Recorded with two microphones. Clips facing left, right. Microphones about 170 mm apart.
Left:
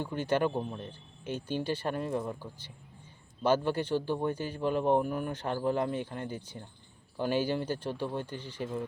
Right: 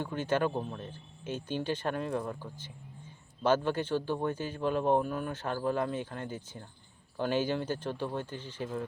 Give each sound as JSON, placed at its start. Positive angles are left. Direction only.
{"t": 0.0, "sound": "a man's voice", "side_deg": 10}